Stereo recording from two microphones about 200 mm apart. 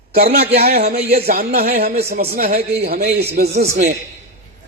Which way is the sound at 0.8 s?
30° right (ahead or behind).